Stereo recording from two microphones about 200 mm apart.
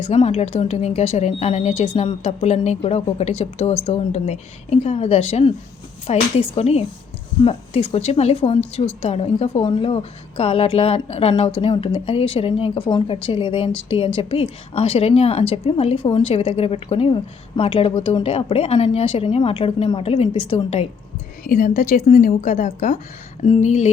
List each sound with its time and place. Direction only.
0.0 s speech: 30° left (ahead or behind)
21.4 s speech: 40° left (ahead or behind)